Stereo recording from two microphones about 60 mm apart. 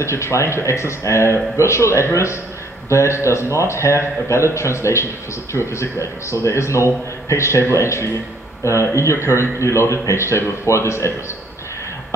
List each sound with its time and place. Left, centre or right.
0.0 s speech: left